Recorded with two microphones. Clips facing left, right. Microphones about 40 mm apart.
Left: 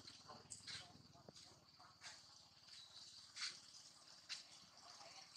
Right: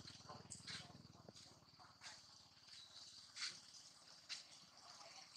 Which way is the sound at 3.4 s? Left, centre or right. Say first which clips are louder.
Even; centre.